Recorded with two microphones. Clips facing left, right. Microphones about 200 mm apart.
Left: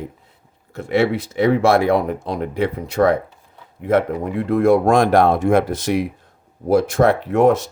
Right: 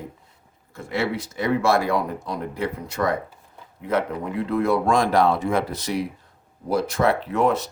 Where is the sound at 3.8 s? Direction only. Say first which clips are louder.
Left 6 dB; 50° left (ahead or behind).